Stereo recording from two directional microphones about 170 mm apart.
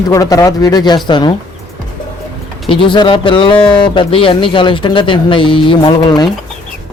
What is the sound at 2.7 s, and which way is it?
A man's voice, 30° left (ahead or behind).